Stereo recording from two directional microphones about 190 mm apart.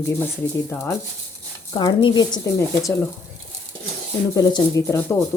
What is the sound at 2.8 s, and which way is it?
Speech, 5° left (ahead or behind).